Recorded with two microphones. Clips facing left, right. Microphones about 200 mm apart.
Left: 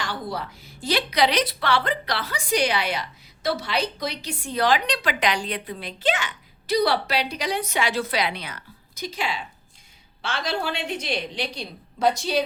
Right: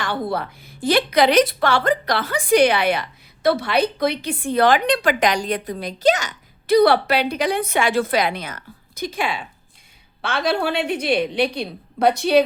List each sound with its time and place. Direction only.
0.0 s a woman's voice: 55° right (ahead or behind)